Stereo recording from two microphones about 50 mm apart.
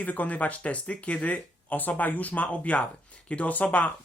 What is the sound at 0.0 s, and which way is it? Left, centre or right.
Speech, left.